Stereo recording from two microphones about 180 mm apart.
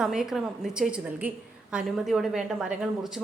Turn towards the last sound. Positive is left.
turn(degrees=0)  # may be behind; listen again after turning